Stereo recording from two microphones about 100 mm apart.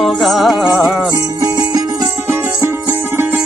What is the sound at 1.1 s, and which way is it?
Music, 35° right (ahead or behind).